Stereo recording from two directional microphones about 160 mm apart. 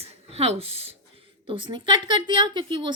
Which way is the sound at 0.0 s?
40° right (ahead or behind).